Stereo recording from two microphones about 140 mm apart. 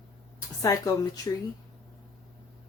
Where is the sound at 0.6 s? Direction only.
25° left (ahead or behind).